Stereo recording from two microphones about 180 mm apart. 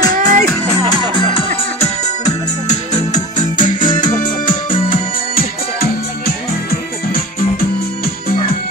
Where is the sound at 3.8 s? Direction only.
25° left (ahead or behind).